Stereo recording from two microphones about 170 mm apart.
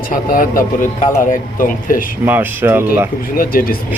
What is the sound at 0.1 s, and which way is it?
Speech, 55° left (ahead or behind).